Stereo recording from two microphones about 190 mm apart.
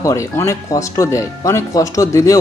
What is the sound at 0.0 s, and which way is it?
Speech, 15° left (ahead or behind).